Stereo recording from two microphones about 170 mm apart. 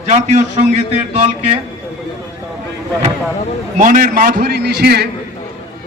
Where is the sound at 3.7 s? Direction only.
50° right (ahead or behind); by 5.1 s 70° right (ahead or behind).